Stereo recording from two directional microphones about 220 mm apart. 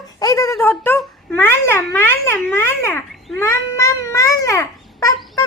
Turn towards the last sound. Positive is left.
turn(degrees=15)  # may be behind; listen again after turning